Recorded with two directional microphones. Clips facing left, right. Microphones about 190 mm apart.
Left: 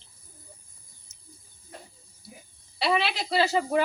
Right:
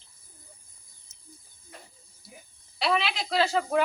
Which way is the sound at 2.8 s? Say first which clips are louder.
Left 1 dB; 5° left (ahead or behind).